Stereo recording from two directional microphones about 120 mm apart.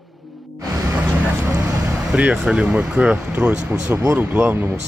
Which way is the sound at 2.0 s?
10° right (ahead or behind).